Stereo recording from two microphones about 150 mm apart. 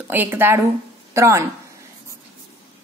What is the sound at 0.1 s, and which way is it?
A woman's voice, 15° right (ahead or behind).